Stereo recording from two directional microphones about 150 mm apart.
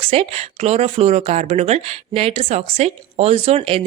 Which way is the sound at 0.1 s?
45° right (ahead or behind).